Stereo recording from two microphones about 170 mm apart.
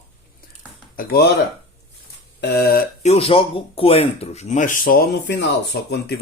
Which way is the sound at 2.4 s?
65° left (ahead or behind).